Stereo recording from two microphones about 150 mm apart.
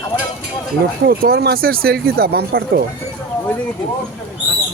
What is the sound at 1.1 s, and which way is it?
Speech, 90° right.